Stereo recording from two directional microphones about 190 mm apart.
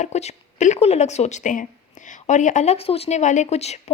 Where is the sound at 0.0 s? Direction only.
35° left (ahead or behind).